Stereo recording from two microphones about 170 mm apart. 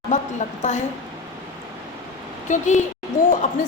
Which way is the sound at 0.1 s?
45° left (ahead or behind).